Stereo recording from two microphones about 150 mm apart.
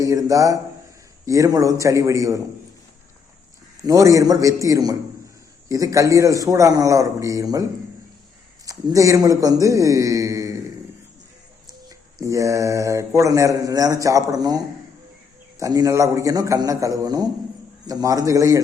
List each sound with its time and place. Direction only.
0.0 s speech: 20° right (ahead or behind)
3.8 s speech: 20° right (ahead or behind)
8.6 s speech: 20° right (ahead or behind)
11.9 s speech: 20° right (ahead or behind)